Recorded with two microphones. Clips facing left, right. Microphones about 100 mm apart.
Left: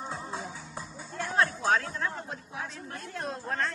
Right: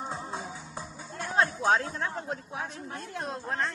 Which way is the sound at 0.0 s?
15° right (ahead or behind).